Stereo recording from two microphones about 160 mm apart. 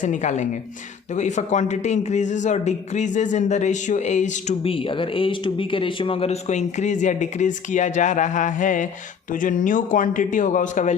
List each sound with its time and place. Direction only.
0.0 s a man's voice: 50° left (ahead or behind)